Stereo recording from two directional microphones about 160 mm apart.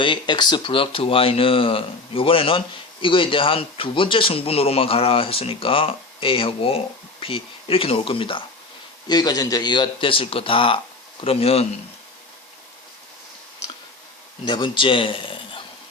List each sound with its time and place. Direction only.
0.0 s speech: 30° left (ahead or behind)
14.4 s a man's voice: 30° left (ahead or behind)